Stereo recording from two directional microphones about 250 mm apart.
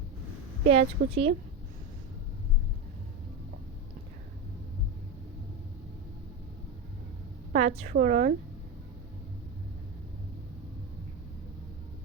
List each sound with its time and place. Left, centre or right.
0.7 s a woman's voice: right
7.5 s a woman's voice: right